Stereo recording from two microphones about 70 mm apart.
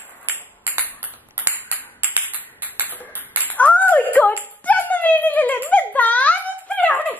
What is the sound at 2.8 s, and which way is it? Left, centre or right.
Music, left.